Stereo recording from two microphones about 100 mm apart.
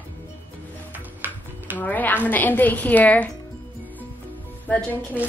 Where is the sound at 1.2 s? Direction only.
20° right (ahead or behind).